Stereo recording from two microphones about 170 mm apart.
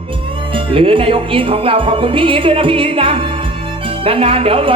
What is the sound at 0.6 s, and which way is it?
Speech, 30° right (ahead or behind).